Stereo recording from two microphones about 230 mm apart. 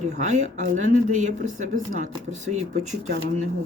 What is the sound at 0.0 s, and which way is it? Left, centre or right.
Speech, right.